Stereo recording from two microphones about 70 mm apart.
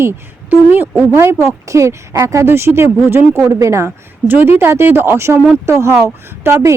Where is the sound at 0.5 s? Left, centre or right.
Right.